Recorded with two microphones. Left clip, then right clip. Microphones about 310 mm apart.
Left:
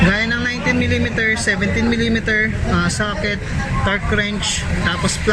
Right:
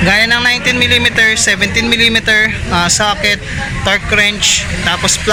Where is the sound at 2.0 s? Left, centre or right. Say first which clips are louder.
Right 9 dB; right.